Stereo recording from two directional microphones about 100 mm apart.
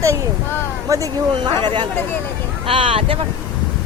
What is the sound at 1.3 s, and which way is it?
Speech, 50° right (ahead or behind).